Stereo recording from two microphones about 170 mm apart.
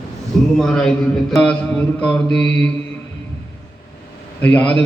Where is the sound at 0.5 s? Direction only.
5° left (ahead or behind).